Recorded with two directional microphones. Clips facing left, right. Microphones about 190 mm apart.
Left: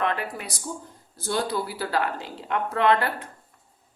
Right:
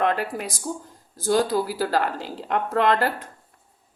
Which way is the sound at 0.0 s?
40° right (ahead or behind).